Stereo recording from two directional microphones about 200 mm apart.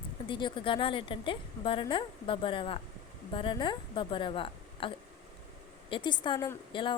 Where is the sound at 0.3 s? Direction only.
25° left (ahead or behind).